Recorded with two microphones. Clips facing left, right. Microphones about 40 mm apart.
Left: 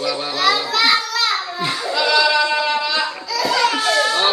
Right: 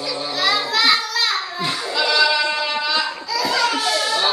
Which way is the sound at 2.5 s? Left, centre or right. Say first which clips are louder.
Left 2 dB; centre.